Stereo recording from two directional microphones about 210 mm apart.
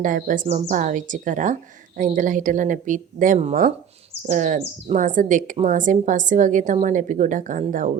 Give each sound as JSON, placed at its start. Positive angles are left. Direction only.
{"t": 0.0, "sound": "speech", "side_deg": -40}